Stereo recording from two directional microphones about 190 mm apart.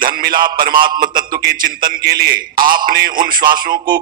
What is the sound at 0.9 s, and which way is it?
Speech, 25° right (ahead or behind).